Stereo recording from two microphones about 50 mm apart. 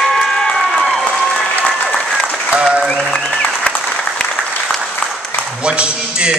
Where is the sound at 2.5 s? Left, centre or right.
Centre.